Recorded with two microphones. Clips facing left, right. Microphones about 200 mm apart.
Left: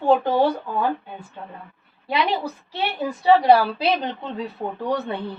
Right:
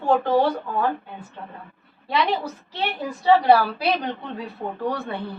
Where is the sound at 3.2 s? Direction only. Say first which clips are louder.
Left 1 dB; 20° left (ahead or behind).